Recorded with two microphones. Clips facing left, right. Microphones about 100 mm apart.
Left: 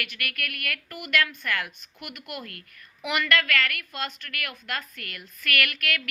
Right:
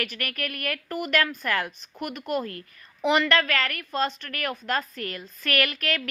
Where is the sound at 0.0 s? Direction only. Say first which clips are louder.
Right 3 dB; 35° right (ahead or behind).